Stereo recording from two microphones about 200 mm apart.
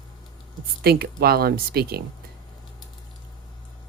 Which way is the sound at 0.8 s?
50° right (ahead or behind).